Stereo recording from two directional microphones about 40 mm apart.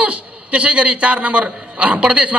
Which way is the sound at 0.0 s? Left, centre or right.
Right.